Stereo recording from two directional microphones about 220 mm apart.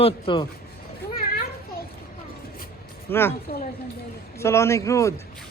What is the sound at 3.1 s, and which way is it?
Speech, 10° left (ahead or behind).